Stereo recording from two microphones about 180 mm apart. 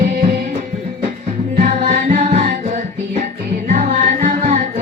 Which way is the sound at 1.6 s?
45° right (ahead or behind).